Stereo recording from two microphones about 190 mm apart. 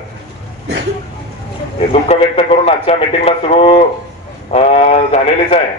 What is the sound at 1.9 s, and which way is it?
Speech, 30° left (ahead or behind).